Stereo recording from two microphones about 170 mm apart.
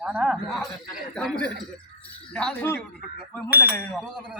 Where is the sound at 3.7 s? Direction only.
10° left (ahead or behind).